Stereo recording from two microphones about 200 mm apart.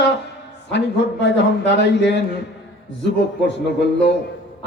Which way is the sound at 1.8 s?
60° left (ahead or behind).